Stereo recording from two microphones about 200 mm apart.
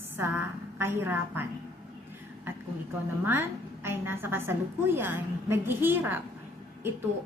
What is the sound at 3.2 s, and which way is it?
A woman's voice, 10° right (ahead or behind).